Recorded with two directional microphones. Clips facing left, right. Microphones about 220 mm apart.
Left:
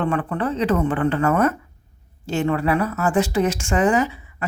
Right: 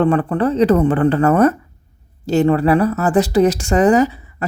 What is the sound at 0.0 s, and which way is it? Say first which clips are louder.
A woman's voice: right 7 dB; 35° right (ahead or behind).